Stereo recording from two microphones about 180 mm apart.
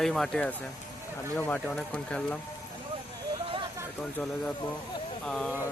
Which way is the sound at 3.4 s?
30° right (ahead or behind).